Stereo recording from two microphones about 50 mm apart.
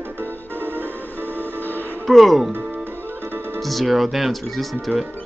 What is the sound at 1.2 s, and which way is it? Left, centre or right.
Music, left.